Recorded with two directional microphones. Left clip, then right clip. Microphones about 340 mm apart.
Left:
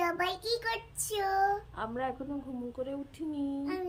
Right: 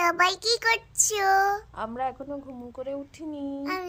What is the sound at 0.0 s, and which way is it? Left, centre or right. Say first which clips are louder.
Speech: right 9 dB; centre.